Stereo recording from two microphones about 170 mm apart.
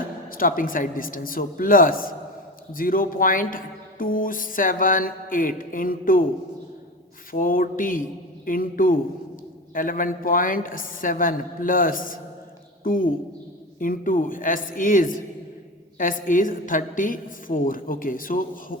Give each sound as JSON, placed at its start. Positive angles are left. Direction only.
{"t": 0.3, "sound": "speech", "side_deg": 55}
{"t": 7.3, "sound": "a woman's voice", "side_deg": 55}